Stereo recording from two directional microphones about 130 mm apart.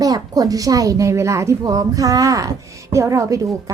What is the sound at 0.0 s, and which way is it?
A woman's voice, 30° right (ahead or behind).